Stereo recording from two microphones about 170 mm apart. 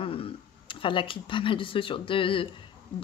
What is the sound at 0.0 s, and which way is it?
Speech, 35° left (ahead or behind).